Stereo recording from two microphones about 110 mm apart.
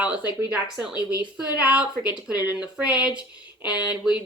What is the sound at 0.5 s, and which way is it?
Speech, 10° right (ahead or behind).